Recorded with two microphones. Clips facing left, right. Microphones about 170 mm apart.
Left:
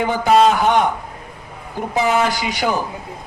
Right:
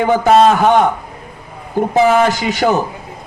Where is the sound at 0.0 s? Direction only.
45° right (ahead or behind).